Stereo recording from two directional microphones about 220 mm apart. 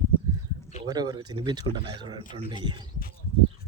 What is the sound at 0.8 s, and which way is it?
Speech, 15° right (ahead or behind).